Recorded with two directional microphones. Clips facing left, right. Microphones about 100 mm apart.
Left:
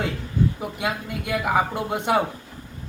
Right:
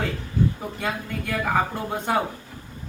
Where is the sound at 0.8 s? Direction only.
15° left (ahead or behind).